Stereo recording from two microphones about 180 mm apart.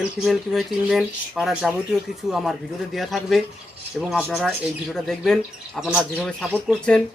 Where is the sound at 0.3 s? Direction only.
Centre (ahead or behind).